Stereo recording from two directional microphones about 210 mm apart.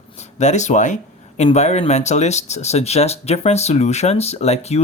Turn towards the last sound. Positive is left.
turn(degrees=30)  # may be behind; listen again after turning